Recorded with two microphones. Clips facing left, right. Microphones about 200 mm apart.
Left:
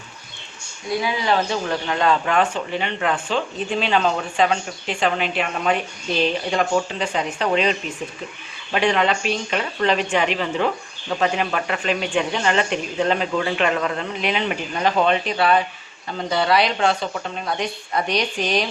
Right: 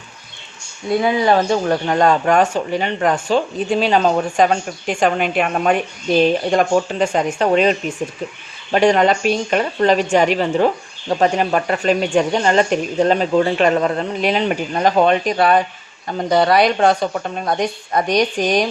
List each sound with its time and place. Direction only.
0.9 s speech: 50° right (ahead or behind)